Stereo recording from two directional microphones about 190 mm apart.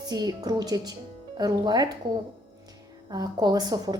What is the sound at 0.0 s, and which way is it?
A woman's voice, 20° right (ahead or behind).